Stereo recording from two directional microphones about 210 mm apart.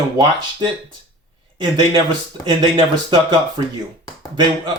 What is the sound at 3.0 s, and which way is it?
Speech, 20° right (ahead or behind).